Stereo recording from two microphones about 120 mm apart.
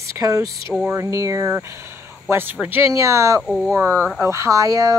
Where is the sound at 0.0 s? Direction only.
25° right (ahead or behind).